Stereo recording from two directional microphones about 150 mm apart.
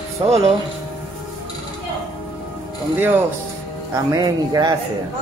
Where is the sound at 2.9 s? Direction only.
15° right (ahead or behind).